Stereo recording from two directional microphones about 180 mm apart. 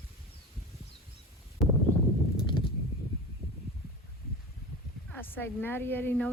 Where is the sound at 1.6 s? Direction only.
Centre (ahead or behind).